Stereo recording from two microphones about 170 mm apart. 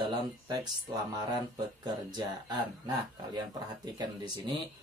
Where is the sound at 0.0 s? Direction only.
25° right (ahead or behind).